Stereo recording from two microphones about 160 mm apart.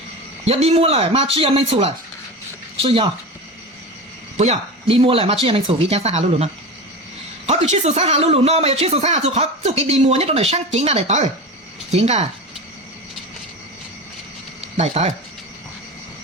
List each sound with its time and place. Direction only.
0.4 s a woman's voice: 40° right (ahead or behind)
4.4 s speech: 40° right (ahead or behind)
14.6 s a sound: 40° right (ahead or behind)